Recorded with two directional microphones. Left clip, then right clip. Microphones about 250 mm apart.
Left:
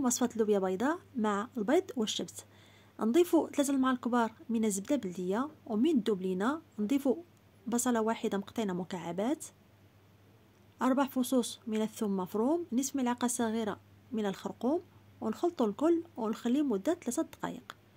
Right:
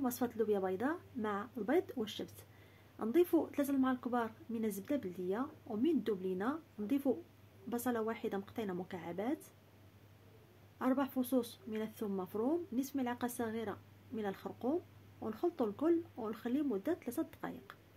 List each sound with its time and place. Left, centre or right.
0.0 s speech: left
10.8 s speech: left